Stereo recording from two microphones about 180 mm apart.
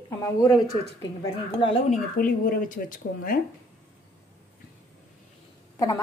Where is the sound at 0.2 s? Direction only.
20° left (ahead or behind).